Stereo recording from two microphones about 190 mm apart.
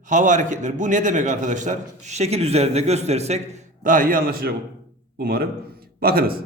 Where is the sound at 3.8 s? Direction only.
45° right (ahead or behind).